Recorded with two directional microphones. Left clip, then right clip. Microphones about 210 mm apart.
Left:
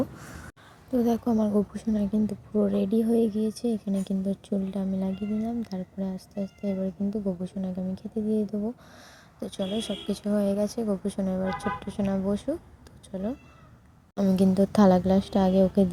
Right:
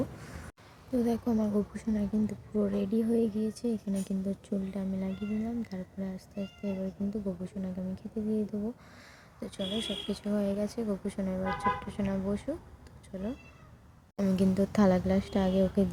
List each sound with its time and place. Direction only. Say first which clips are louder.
0.9 s a woman's voice: left 5 dB; 15° left (ahead or behind)